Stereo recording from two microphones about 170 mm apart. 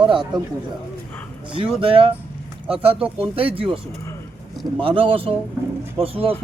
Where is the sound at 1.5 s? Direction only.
35° right (ahead or behind).